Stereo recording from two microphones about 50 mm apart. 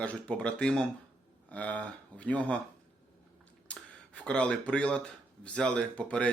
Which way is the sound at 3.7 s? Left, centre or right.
Left.